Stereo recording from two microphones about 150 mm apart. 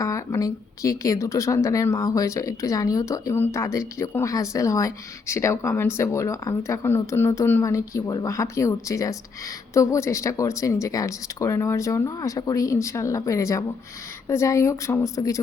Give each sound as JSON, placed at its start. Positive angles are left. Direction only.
{"t": 0.0, "sound": "a woman's voice", "side_deg": 20}